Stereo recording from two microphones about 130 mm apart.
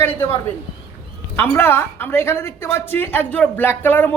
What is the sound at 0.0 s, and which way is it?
A woman's voice, 15° left (ahead or behind).